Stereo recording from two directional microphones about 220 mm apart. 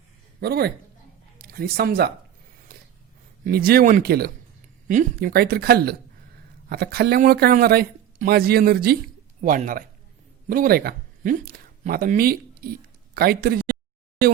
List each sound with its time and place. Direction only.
0.3 s speech: 45° right (ahead or behind)
3.4 s speech: 45° right (ahead or behind)